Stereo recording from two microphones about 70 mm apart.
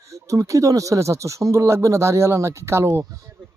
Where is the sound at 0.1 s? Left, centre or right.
Right.